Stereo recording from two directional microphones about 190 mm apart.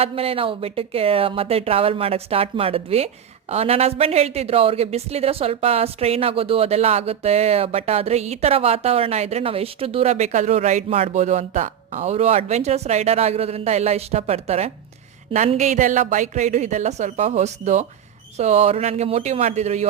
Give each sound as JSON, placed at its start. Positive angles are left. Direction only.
{"t": 0.0, "sound": "speech", "side_deg": -30}